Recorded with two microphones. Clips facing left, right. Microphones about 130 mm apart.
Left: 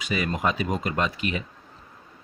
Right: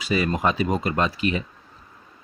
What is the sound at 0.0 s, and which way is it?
Speech, 35° right (ahead or behind).